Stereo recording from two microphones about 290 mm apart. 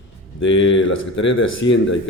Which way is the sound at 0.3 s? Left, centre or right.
Left.